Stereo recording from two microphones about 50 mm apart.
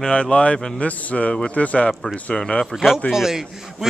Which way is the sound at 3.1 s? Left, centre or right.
Centre.